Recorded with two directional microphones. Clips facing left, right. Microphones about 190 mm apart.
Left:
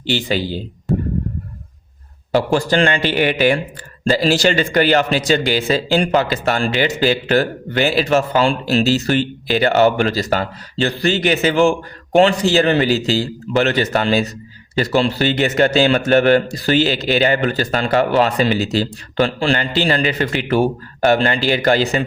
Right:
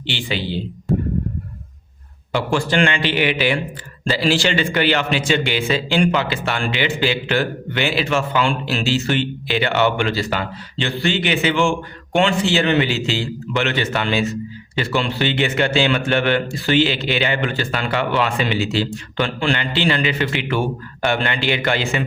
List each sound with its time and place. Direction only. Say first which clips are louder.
0.1 s a man's voice: left 5 dB; 40° left (ahead or behind)
0.9 s a sound: left 1 dB; centre (ahead or behind)
2.3 s a man's voice: left 4 dB; 40° left (ahead or behind)